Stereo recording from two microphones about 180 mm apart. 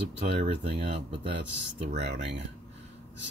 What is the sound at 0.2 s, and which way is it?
Speech, 35° right (ahead or behind).